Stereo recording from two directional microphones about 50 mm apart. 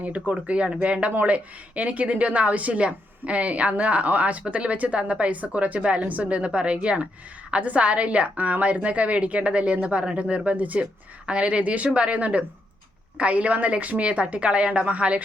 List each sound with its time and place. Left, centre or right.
0.0 s speech: right